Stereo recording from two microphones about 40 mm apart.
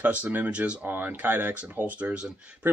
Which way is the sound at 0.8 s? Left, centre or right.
Right.